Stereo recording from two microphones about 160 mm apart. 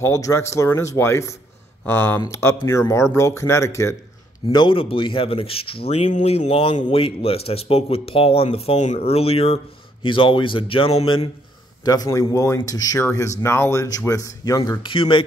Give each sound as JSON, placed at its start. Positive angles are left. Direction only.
{"t": 0.0, "sound": "speech", "side_deg": 20}
{"t": 4.5, "sound": "speech", "side_deg": 30}
{"t": 11.8, "sound": "speech", "side_deg": 25}